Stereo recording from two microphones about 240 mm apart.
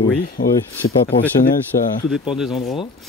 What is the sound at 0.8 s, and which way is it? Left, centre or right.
Speech, left.